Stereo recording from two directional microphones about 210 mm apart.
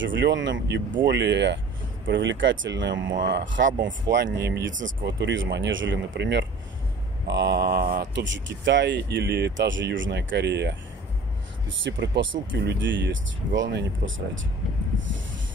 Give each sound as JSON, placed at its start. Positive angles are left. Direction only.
{"t": 0.0, "sound": "speech", "side_deg": -60}
{"t": 11.8, "sound": "speech", "side_deg": -60}
{"t": 14.9, "sound": "snort", "side_deg": -65}